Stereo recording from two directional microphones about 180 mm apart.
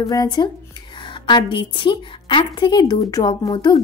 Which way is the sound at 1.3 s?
25° left (ahead or behind).